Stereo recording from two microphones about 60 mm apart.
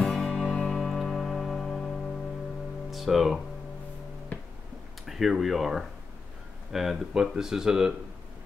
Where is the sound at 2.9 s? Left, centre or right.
Centre.